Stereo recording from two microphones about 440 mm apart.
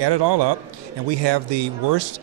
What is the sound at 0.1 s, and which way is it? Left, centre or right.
Speech, right.